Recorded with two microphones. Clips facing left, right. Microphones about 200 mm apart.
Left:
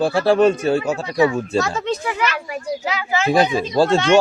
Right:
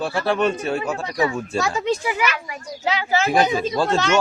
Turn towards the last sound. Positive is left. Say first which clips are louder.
# left 4 dB
turn(degrees=35)  # may be behind; listen again after turning